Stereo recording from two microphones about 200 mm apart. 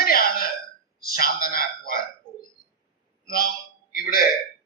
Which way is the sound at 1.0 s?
45° left (ahead or behind).